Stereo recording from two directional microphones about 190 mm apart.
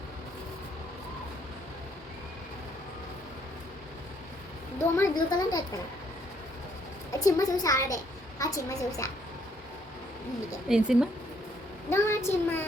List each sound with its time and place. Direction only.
4.8 s a woman's voice: 20° left (ahead or behind)
7.1 s a child's voice: 20° left (ahead or behind)
10.7 s speech: 5° right (ahead or behind)
11.9 s a child's voice: 15° left (ahead or behind)